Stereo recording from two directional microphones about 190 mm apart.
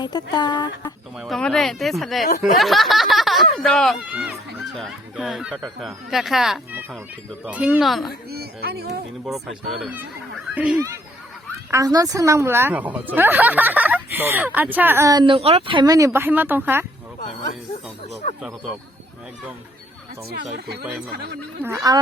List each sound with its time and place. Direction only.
0.0 s speech: 20° left (ahead or behind)
1.2 s speech: 5° left (ahead or behind)
8.3 s speech: 55° right (ahead or behind)
9.2 s a woman's voice: centre (ahead or behind)
20.4 s speech: 60° right (ahead or behind)
21.6 s speech: 15° right (ahead or behind)